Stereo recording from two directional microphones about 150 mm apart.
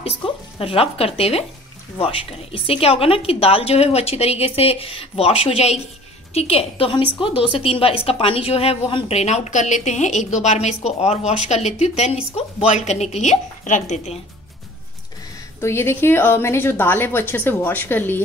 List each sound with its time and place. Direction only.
0.0 s a woman's voice: 40° left (ahead or behind)
15.6 s a woman's voice: 15° left (ahead or behind)